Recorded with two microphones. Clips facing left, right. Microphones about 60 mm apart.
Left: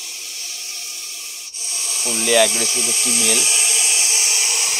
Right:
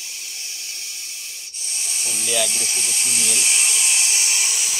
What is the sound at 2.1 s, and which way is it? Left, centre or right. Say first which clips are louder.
Speech: left 9 dB; left.